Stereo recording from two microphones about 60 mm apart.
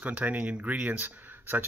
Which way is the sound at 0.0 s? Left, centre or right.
Right.